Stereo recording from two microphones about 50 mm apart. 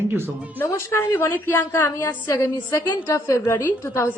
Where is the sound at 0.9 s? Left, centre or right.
Left.